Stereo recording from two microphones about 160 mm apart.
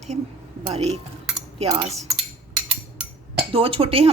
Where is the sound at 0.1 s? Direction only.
45° right (ahead or behind).